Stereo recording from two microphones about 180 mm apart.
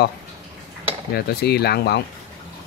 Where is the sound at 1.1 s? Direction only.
65° left (ahead or behind).